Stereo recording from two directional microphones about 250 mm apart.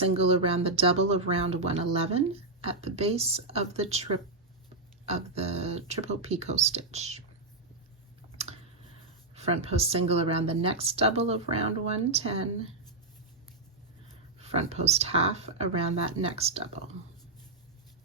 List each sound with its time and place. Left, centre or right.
0.0 s speech: right
5.0 s speech: right
9.3 s speech: right
14.4 s speech: right